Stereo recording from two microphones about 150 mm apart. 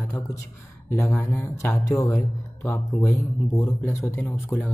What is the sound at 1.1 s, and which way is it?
Speech, 15° left (ahead or behind).